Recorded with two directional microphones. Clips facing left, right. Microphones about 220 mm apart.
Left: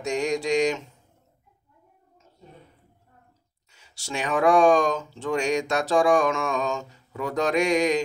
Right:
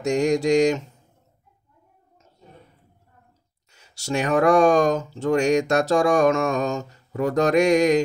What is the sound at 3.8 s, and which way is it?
Mantra, 40° right (ahead or behind).